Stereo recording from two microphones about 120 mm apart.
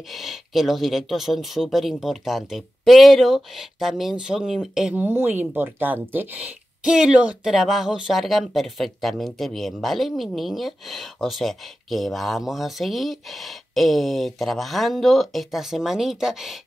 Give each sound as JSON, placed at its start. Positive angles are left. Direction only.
{"t": 0.1, "sound": "speech", "side_deg": 0}
{"t": 5.0, "sound": "speech", "side_deg": -15}